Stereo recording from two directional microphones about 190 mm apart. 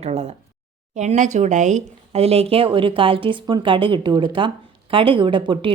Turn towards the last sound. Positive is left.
turn(degrees=-25)  # may be behind; listen again after turning